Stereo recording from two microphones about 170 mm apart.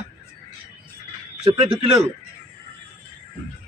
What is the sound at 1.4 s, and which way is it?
Speech, 35° right (ahead or behind).